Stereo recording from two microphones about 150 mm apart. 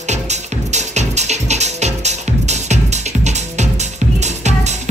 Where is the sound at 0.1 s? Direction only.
50° right (ahead or behind).